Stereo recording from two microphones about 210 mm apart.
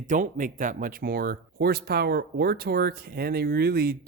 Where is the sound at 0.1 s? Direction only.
35° right (ahead or behind).